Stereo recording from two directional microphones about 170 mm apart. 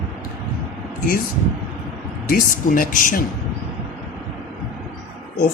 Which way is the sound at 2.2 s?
55° left (ahead or behind).